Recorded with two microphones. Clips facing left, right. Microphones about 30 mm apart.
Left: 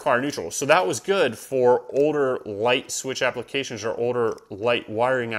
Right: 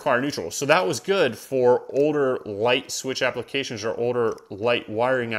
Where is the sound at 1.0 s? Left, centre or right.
Centre.